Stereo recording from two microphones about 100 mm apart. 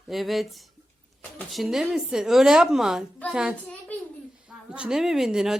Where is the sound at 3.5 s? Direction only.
15° left (ahead or behind).